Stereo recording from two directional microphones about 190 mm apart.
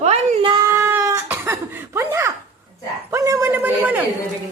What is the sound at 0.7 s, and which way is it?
Cough, 15° right (ahead or behind).